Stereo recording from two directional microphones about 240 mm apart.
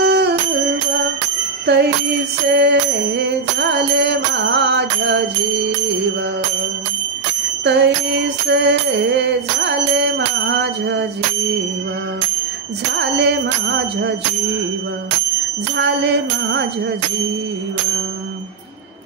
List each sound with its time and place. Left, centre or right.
0.0 s music: right
1.7 s jingle bell: right
7.6 s music: right
13.0 s music: right
15.7 s music: right